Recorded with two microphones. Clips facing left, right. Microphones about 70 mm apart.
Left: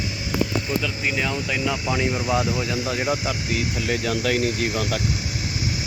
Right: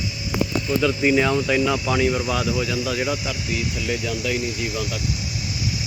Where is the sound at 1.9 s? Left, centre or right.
Centre.